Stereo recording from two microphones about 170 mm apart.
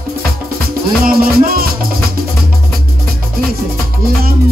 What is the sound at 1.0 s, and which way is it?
Music, 60° right (ahead or behind).